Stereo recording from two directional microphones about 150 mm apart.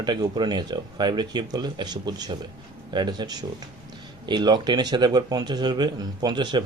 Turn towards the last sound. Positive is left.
turn(degrees=-30)  # may be behind; listen again after turning